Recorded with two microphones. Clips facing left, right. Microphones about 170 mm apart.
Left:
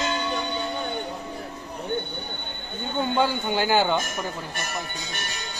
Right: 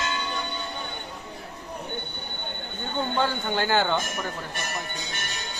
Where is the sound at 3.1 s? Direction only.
10° left (ahead or behind).